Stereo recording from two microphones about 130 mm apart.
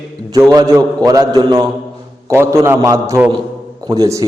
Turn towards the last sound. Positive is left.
turn(degrees=-25)  # may be behind; listen again after turning